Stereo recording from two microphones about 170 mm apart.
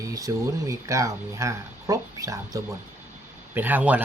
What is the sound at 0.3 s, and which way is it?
Speech, 20° right (ahead or behind).